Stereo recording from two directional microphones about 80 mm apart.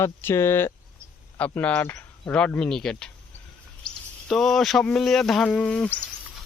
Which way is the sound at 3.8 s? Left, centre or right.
Centre.